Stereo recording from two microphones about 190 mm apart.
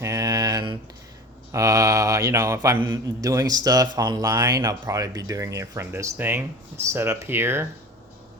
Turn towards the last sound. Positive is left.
turn(degrees=-10)  # may be behind; listen again after turning